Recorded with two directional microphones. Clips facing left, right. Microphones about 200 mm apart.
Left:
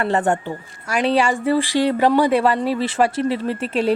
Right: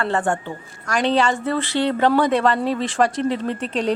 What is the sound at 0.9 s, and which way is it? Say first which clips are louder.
A woman's voice: left 1 dB; 10° left (ahead or behind).